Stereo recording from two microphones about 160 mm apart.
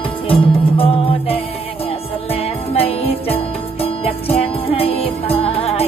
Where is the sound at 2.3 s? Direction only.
40° left (ahead or behind).